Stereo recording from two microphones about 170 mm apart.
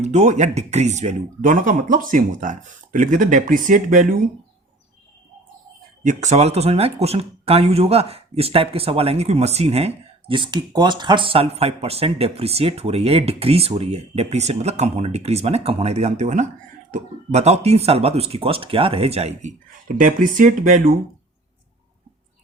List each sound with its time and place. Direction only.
0.0 s speech: 40° right (ahead or behind)
6.0 s speech: 45° right (ahead or behind)
20.0 s speech: 55° right (ahead or behind)